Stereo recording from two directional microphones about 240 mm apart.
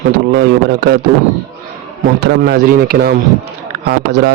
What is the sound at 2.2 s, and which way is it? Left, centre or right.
Speech, right.